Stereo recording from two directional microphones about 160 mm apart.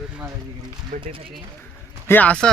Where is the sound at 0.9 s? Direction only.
55° right (ahead or behind).